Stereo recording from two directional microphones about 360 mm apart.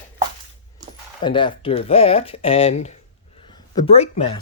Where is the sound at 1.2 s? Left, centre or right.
Centre.